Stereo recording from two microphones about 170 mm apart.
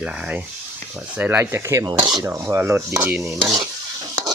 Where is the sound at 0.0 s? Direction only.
5° right (ahead or behind).